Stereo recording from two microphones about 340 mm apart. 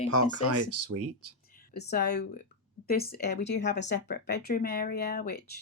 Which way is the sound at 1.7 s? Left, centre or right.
Left.